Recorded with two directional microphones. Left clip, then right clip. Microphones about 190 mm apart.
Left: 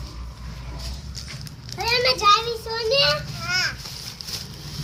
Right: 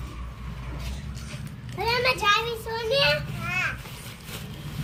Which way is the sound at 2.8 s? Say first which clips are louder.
Left 3 dB; 15° left (ahead or behind).